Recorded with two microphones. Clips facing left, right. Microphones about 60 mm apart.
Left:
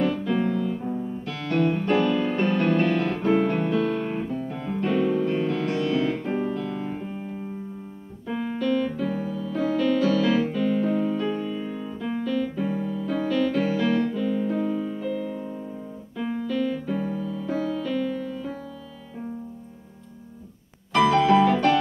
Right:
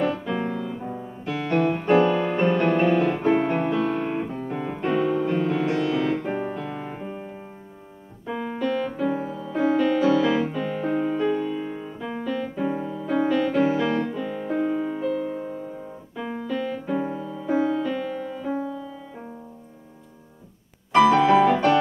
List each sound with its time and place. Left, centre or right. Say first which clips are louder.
0.0 s music: left 1 dB; centre
8.3 s piano: even; centre
8.5 s music: left 1 dB; centre
12.0 s music: left 2 dB; centre
20.9 s piano: right 2 dB; right